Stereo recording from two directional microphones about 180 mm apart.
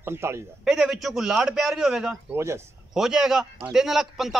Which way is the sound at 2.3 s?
15° right (ahead or behind).